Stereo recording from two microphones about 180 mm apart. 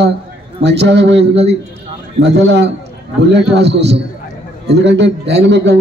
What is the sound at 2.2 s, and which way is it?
A man's voice, 75° right (ahead or behind).